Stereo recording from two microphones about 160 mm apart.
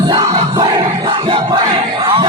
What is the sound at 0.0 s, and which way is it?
Battle cry, 25° right (ahead or behind).